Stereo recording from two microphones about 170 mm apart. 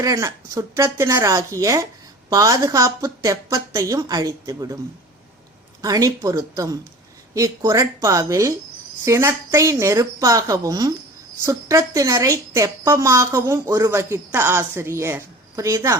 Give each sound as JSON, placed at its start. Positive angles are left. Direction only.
{"t": 0.0, "sound": "a woman's voice", "side_deg": -20}
{"t": 5.8, "sound": "a woman's voice", "side_deg": -20}